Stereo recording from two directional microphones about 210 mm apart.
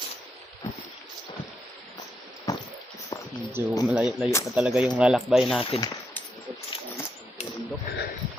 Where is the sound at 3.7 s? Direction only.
Centre (ahead or behind).